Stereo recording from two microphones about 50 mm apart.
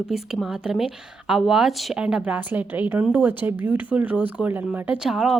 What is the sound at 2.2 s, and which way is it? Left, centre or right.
Speech, right.